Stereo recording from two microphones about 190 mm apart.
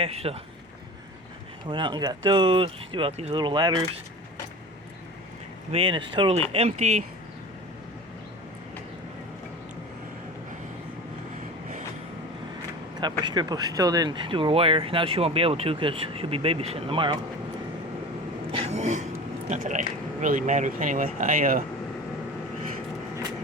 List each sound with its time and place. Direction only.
0.0 s speech: 30° right (ahead or behind)
1.6 s speech: 25° right (ahead or behind)
5.7 s speech: 25° right (ahead or behind)
13.0 s speech: 25° right (ahead or behind)
18.5 s a sound: 35° right (ahead or behind)
19.5 s speech: 40° right (ahead or behind)